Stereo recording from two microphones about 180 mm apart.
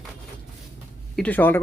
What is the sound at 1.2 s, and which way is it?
Speech, 10° left (ahead or behind).